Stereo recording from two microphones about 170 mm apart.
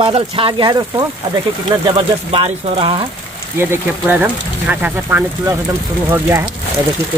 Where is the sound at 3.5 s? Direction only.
10° right (ahead or behind).